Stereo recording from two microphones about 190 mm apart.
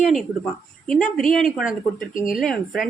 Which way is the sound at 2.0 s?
45° left (ahead or behind).